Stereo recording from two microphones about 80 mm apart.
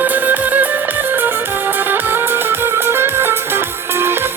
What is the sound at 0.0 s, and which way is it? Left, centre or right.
Music, right.